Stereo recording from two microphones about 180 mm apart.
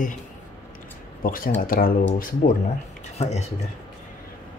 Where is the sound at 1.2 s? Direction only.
50° left (ahead or behind).